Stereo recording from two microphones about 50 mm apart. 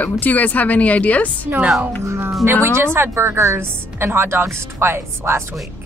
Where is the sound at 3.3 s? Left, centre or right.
Right.